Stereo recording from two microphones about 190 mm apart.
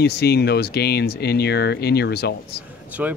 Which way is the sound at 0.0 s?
60° left (ahead or behind).